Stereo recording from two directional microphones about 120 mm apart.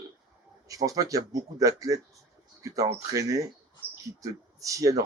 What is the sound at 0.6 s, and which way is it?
Speech, 30° right (ahead or behind).